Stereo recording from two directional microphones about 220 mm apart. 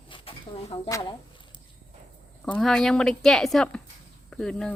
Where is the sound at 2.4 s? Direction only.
5° left (ahead or behind).